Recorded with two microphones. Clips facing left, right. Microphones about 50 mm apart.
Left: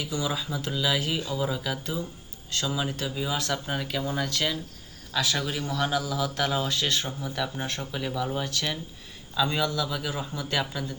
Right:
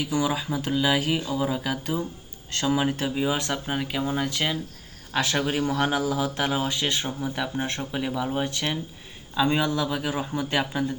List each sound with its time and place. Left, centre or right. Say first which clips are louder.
0.0 s speech: right 5 dB; right
5.1 s speech: right 4 dB; right